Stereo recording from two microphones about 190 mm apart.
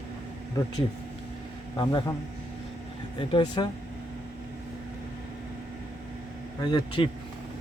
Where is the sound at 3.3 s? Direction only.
25° left (ahead or behind).